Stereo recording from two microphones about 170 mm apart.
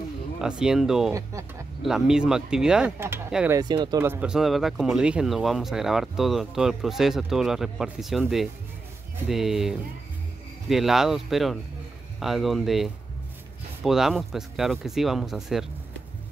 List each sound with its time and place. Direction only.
0.4 s speech: 5° right (ahead or behind)
3.5 s speech: 25° right (ahead or behind)
4.0 s speech: 10° right (ahead or behind)